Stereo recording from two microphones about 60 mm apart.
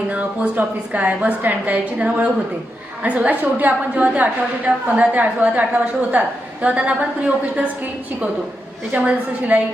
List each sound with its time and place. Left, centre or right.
0.1 s a woman's voice: right
9.0 s a woman's voice: right